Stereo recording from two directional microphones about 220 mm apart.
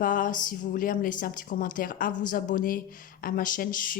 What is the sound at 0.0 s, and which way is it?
Speech, 35° left (ahead or behind).